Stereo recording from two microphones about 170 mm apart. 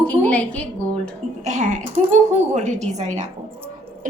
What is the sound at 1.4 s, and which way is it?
A woman's voice, 45° right (ahead or behind).